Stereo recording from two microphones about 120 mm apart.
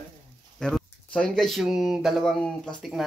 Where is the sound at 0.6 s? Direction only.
5° left (ahead or behind).